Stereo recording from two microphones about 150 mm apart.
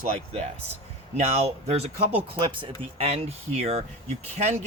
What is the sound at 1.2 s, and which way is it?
Speech, 45° right (ahead or behind).